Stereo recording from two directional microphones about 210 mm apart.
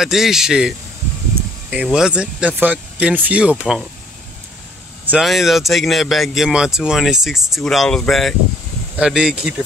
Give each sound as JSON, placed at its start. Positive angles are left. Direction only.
{"t": 0.0, "sound": "speech", "side_deg": 0}
{"t": 5.1, "sound": "speech", "side_deg": 0}